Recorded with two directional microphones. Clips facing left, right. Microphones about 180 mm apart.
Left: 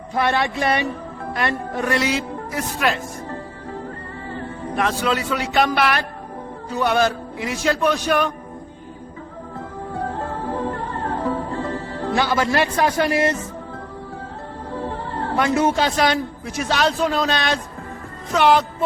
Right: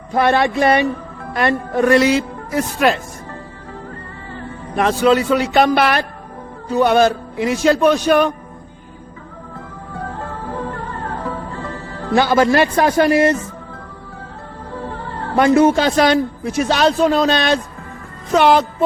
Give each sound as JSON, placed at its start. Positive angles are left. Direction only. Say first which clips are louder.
{"t": 0.1, "sound": "a man's voice", "louder": "right 6 dB", "side_deg": -50}
{"t": 4.8, "sound": "speech", "louder": "right 8 dB", "side_deg": -30}
{"t": 10.2, "sound": "music", "louder": "left 1 dB", "side_deg": 30}
{"t": 12.1, "sound": "a man's voice", "louder": "right 7 dB", "side_deg": -45}
{"t": 14.8, "sound": "music", "louder": "left 1 dB", "side_deg": 30}
{"t": 15.4, "sound": "a man's voice", "louder": "right 7 dB", "side_deg": -45}